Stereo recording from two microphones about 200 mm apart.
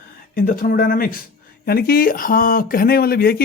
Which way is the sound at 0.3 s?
45° left (ahead or behind).